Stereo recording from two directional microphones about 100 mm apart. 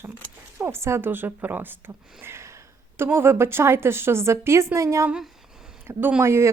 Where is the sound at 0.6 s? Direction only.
25° right (ahead or behind).